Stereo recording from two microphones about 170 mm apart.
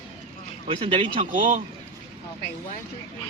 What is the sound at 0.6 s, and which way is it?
Speech, 35° right (ahead or behind).